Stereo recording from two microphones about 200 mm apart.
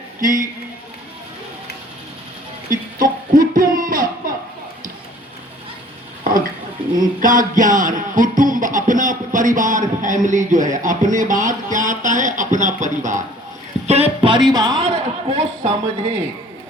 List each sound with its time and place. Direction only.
0.2 s music: 40° right (ahead or behind)
3.0 s a sound: 40° right (ahead or behind)
7.0 s music: 40° right (ahead or behind)
13.8 s a man's voice: 30° right (ahead or behind)